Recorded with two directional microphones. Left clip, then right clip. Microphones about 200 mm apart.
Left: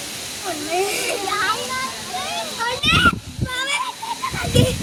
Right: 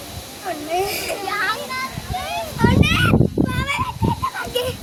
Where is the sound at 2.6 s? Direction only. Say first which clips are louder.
Even; 5° left (ahead or behind).